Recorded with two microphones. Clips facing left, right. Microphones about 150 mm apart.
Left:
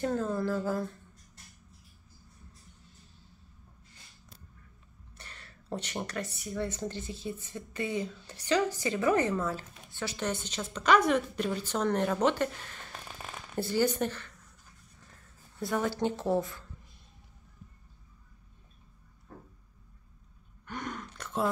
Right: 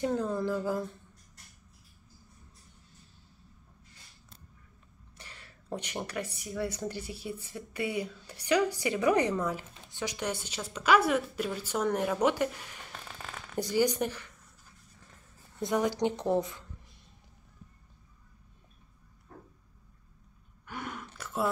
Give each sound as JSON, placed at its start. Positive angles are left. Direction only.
{"t": 0.0, "sound": "speech", "side_deg": -15}
{"t": 5.1, "sound": "speech", "side_deg": -10}
{"t": 13.1, "sound": "a sound", "side_deg": 10}
{"t": 13.6, "sound": "speech", "side_deg": -15}
{"t": 15.6, "sound": "speech", "side_deg": -15}
{"t": 20.6, "sound": "a sound", "side_deg": -5}